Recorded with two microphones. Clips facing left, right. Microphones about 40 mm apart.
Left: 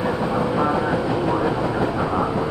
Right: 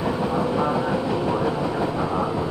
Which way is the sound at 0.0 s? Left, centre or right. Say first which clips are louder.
Left 1 dB; centre.